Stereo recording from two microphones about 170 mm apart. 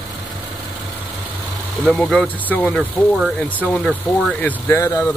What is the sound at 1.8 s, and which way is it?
Speech, centre (ahead or behind).